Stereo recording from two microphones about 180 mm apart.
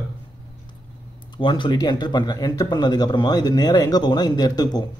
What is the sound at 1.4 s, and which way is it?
Speech, 25° left (ahead or behind).